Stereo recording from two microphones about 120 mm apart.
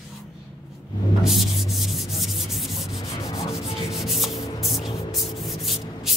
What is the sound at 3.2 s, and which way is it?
Rub, 30° left (ahead or behind).